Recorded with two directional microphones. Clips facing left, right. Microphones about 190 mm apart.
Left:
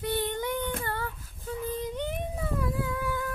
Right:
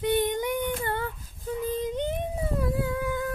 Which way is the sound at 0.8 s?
20° right (ahead or behind).